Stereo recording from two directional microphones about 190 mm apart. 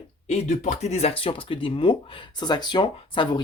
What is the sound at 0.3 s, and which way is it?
Speech, 40° left (ahead or behind).